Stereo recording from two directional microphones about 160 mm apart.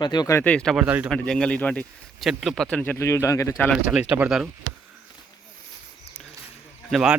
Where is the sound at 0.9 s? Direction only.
10° right (ahead or behind).